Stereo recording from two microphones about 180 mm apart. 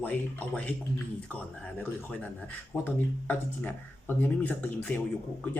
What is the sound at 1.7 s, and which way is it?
Speech, 10° left (ahead or behind).